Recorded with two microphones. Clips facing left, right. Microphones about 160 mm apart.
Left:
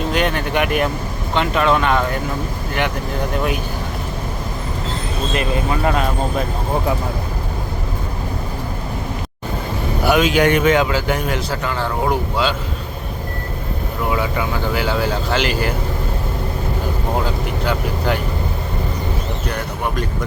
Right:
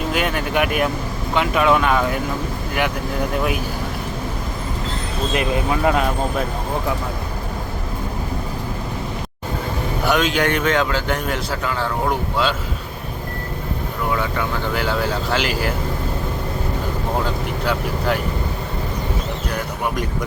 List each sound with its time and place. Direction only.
0.1 s speech: 5° right (ahead or behind)
5.3 s speech: 15° right (ahead or behind)
10.1 s a man's voice: 10° left (ahead or behind)
14.1 s speech: 10° left (ahead or behind)
17.7 s speech: centre (ahead or behind)
19.5 s speech: 5° right (ahead or behind)